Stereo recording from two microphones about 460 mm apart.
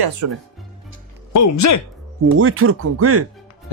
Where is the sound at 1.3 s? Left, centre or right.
Left.